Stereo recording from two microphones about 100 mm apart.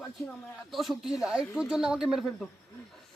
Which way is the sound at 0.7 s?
Centre (ahead or behind).